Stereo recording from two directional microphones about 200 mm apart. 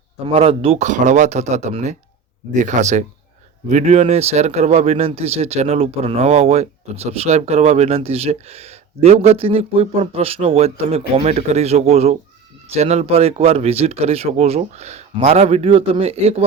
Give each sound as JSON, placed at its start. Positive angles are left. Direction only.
{"t": 0.3, "sound": "speech", "side_deg": -30}